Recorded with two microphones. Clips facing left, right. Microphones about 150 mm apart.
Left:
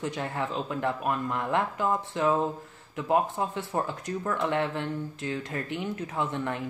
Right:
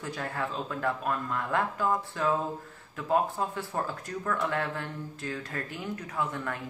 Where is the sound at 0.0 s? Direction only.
20° left (ahead or behind).